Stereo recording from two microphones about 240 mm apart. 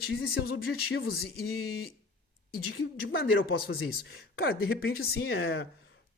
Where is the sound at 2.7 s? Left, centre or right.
Left.